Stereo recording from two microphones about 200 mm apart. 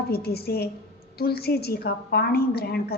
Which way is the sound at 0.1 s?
50° left (ahead or behind).